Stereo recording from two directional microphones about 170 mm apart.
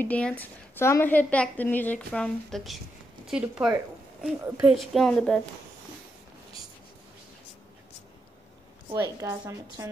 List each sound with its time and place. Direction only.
0.0 s a woman's voice: 10° left (ahead or behind)
8.9 s a woman's voice: 15° right (ahead or behind)